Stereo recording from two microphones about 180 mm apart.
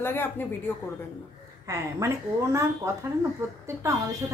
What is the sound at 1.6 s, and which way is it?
A woman's voice, 15° right (ahead or behind).